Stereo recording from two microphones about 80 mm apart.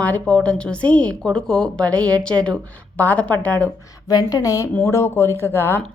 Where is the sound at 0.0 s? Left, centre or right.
Centre.